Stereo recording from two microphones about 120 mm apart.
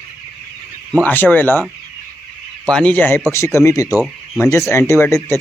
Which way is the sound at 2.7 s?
10° left (ahead or behind).